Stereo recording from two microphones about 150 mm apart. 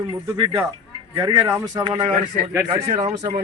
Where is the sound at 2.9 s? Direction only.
50° right (ahead or behind).